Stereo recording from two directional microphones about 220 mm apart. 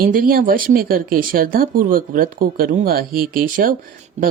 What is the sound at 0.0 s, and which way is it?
Speech, 40° right (ahead or behind).